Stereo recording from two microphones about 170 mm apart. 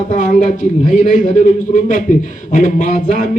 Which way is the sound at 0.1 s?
45° left (ahead or behind).